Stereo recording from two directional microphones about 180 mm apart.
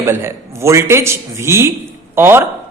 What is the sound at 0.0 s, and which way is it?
A man's voice, 15° right (ahead or behind).